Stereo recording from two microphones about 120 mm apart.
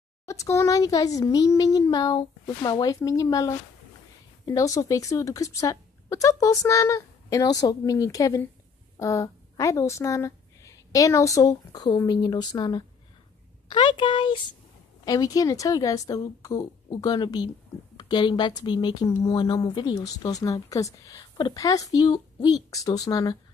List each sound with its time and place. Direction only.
0.3 s a woman's voice: 25° left (ahead or behind); by 14.4 s 40° left (ahead or behind)
15.0 s speech: 30° left (ahead or behind)